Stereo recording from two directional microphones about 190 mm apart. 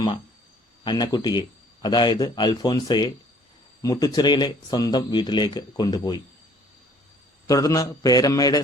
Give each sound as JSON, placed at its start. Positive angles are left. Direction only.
{"t": 0.9, "sound": "speech", "side_deg": 20}
{"t": 7.4, "sound": "speech", "side_deg": 20}